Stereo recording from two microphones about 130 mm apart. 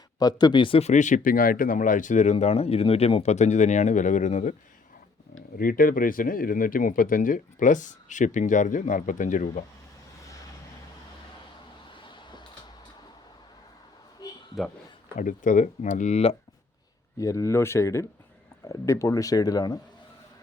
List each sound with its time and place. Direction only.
0.2 s speech: 30° left (ahead or behind); by 3.3 s 50° left (ahead or behind)
3.3 s speech: 65° left (ahead or behind)
5.5 s speech: 90° left
11.9 s a sound: 35° left (ahead or behind)
14.2 s a sound: 30° left (ahead or behind)
14.6 s speech: centre (ahead or behind)
15.2 s speech: 85° left; by 16.3 s 60° left (ahead or behind)
17.2 s speech: 25° left (ahead or behind)